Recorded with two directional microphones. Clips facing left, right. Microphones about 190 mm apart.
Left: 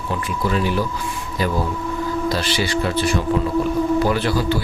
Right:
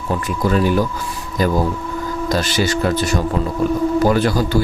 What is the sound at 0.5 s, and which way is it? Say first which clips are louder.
Speech: right 5 dB; 45° right (ahead or behind).